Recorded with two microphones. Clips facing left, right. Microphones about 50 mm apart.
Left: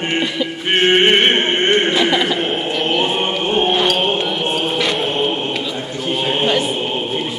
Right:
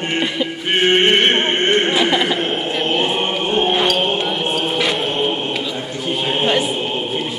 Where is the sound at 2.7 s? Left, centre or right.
Centre.